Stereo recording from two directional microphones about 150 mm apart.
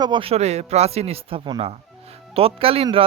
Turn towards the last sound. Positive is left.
turn(degrees=-40)  # may be behind; listen again after turning